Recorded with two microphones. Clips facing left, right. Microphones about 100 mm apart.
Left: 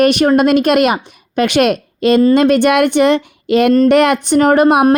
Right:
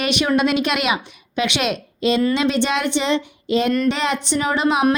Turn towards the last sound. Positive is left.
turn(degrees=50)  # may be behind; listen again after turning